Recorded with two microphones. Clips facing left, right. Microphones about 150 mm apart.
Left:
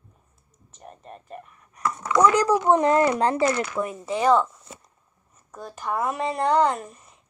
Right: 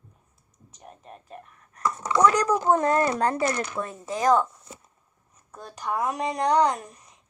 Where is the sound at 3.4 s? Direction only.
10° left (ahead or behind).